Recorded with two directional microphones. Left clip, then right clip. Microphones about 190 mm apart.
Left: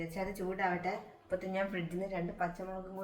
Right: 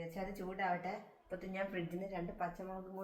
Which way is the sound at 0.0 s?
Centre (ahead or behind).